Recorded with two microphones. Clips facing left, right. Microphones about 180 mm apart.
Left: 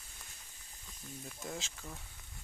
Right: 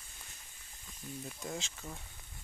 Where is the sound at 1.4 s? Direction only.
Centre (ahead or behind).